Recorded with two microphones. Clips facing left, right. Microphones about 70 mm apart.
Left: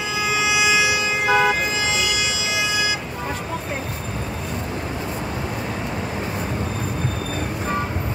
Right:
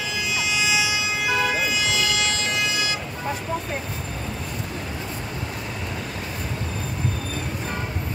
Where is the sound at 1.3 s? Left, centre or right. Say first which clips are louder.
Left 5 dB; left; by 2.6 s centre.